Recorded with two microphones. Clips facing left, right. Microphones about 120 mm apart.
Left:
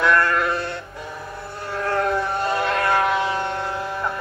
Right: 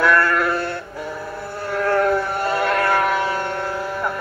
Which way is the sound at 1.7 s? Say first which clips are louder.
Right 4 dB; 20° left (ahead or behind).